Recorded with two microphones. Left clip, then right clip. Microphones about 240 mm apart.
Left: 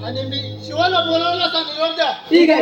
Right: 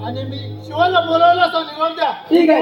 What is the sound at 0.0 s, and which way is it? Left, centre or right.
A man's voice, right.